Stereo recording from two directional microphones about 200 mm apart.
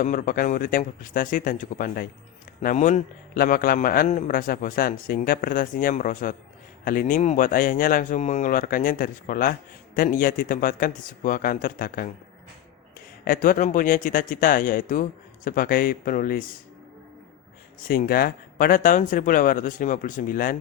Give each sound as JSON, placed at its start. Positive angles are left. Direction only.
{"t": 0.0, "sound": "speech", "side_deg": 45}
{"t": 13.2, "sound": "speech", "side_deg": 45}
{"t": 17.8, "sound": "speech", "side_deg": 45}